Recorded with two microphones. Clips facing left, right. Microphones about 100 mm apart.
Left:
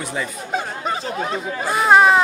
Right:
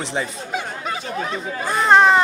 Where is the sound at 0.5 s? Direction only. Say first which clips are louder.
Left 3 dB; 35° left (ahead or behind).